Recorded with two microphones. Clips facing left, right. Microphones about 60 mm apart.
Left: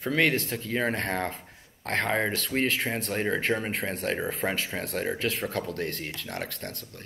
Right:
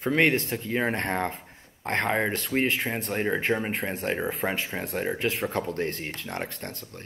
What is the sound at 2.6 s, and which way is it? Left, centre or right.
Speech, centre.